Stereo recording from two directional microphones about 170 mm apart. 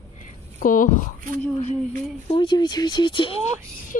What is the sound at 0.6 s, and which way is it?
Speech, 55° left (ahead or behind).